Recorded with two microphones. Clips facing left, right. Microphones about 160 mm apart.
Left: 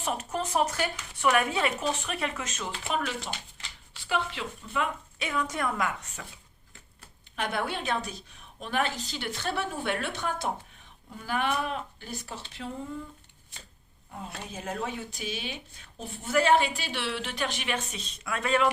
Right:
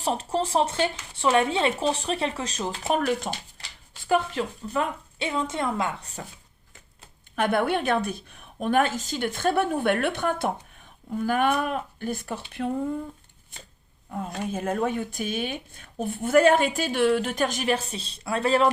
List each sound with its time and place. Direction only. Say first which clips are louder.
0.0 s speech: right 5 dB; 30° right (ahead or behind)
5.3 s a woman's voice: right 3 dB; 25° right (ahead or behind)
7.3 s speech: right 8 dB; 55° right (ahead or behind)
14.5 s speech: right 8 dB; 50° right (ahead or behind); by 18.7 s 35° right (ahead or behind)